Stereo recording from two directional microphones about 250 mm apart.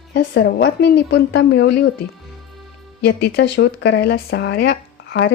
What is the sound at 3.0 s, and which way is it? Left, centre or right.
Speech, left.